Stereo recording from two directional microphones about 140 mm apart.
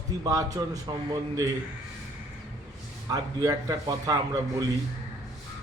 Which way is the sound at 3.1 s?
25° right (ahead or behind).